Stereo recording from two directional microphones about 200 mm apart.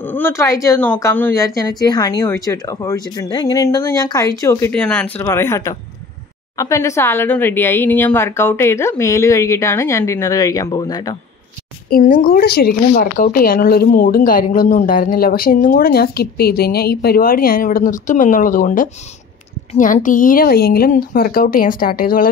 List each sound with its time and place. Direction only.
0.0 s a woman's voice: 10° left (ahead or behind)
11.9 s speech: 40° left (ahead or behind)